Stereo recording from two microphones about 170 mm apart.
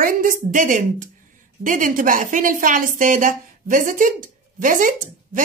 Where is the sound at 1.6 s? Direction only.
50° right (ahead or behind).